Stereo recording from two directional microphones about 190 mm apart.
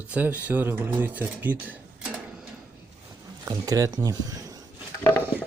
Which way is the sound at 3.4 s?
20° right (ahead or behind).